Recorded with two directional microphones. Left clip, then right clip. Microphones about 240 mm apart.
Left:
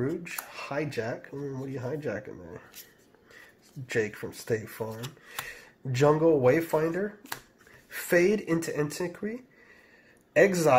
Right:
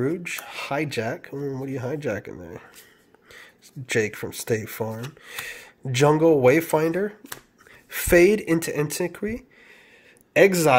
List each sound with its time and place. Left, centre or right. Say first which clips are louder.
0.0 s speech: right 6 dB; right